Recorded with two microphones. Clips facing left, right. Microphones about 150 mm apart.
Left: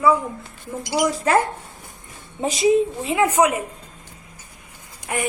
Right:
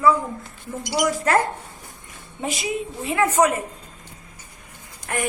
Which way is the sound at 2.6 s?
20° left (ahead or behind).